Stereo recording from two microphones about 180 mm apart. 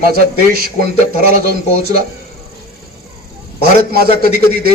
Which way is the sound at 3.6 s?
60° right (ahead or behind).